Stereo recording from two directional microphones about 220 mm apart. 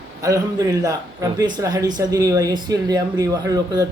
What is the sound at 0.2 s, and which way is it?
Speech, 15° right (ahead or behind).